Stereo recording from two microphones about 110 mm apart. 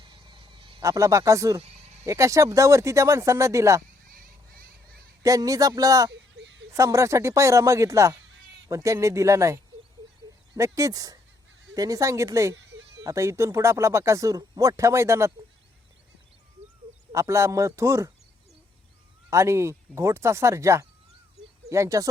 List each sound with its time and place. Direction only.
0.0 s a sound: 45° right (ahead or behind)
0.8 s speech: 30° right (ahead or behind)
5.2 s speech: 30° right (ahead or behind)
17.1 s speech: 25° right (ahead or behind)
19.3 s speech: 25° right (ahead or behind)